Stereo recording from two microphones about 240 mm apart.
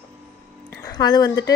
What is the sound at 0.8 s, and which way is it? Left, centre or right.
Speech, centre.